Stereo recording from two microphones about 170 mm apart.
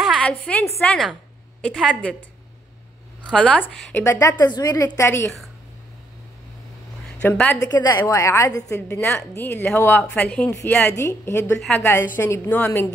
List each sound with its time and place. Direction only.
0.0 s a woman's voice: 5° left (ahead or behind)
3.3 s a woman's voice: 5° left (ahead or behind)
7.2 s a woman's voice: 10° left (ahead or behind)
7.6 s a woman's voice: 20° left (ahead or behind)